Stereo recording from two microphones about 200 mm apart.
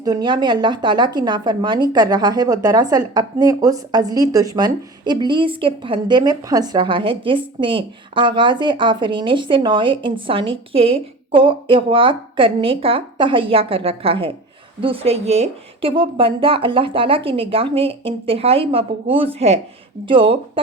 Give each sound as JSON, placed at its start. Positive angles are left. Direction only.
{"t": 0.0, "sound": "speech", "side_deg": -20}